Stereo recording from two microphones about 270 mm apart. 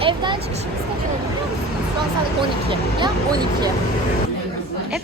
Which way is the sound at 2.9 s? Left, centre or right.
Centre.